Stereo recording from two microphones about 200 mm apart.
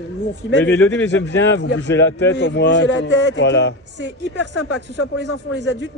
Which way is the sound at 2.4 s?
60° left (ahead or behind).